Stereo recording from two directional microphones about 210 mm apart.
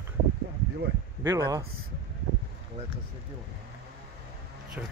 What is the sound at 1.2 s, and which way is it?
Speech, 15° right (ahead or behind).